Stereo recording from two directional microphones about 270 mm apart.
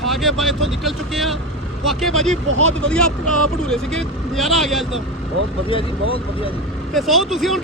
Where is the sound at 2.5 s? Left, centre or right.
Right.